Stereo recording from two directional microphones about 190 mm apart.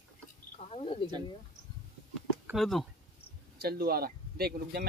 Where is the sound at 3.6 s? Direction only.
55° right (ahead or behind).